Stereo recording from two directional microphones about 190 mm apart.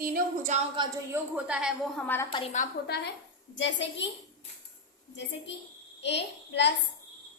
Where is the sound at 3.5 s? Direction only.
70° left (ahead or behind).